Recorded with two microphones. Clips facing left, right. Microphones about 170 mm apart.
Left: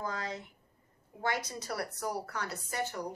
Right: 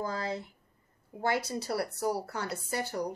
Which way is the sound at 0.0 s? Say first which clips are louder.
Right 4 dB; 30° right (ahead or behind).